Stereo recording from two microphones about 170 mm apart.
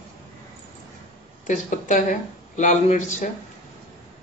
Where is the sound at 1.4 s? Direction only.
45° left (ahead or behind).